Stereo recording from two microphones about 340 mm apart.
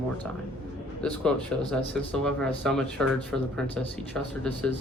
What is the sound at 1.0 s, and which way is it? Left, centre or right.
Speech, centre.